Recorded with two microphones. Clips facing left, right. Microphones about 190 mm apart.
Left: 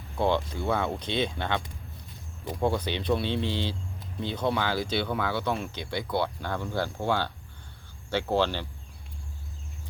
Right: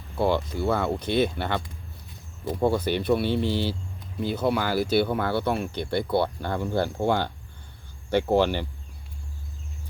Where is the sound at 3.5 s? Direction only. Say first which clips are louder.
Right 5 dB; 20° left (ahead or behind).